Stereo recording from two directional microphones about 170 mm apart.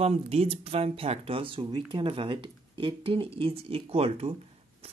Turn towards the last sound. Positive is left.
turn(degrees=-35)  # may be behind; listen again after turning